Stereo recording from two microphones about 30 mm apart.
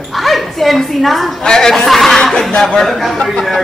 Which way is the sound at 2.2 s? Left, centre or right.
Centre.